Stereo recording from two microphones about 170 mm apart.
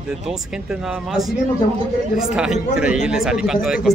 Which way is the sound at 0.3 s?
5° right (ahead or behind).